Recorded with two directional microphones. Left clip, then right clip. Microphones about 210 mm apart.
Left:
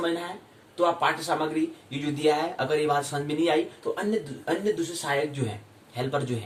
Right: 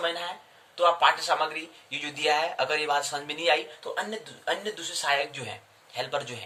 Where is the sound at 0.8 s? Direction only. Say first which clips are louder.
Right 2 dB; 5° left (ahead or behind).